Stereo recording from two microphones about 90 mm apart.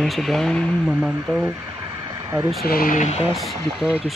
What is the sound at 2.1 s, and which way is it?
Vehicle, 35° right (ahead or behind).